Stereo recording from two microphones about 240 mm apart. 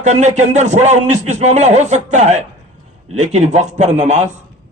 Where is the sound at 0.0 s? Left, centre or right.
Right.